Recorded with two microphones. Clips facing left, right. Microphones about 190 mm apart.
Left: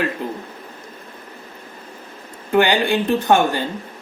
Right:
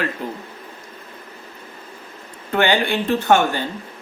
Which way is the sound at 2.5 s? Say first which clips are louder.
Left 2 dB; 15° left (ahead or behind).